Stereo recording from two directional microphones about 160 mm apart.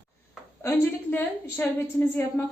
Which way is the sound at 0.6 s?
15° left (ahead or behind).